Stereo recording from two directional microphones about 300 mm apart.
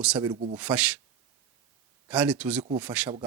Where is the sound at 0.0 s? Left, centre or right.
Centre.